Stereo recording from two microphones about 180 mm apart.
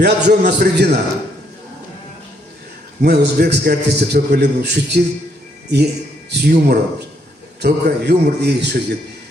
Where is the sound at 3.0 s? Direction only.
65° right (ahead or behind).